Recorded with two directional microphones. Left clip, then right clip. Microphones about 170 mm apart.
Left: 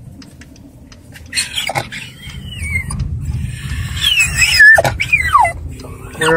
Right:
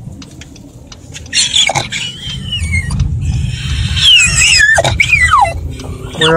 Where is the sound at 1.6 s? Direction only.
10° left (ahead or behind).